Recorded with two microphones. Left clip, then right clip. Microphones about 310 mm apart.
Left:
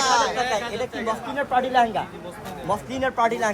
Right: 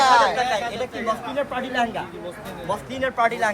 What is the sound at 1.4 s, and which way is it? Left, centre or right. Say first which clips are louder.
Speech: left 8 dB; left.